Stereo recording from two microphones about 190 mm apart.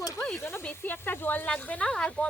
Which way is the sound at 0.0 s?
15° left (ahead or behind).